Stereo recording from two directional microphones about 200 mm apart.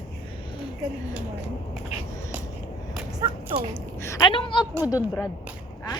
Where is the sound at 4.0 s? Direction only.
20° left (ahead or behind).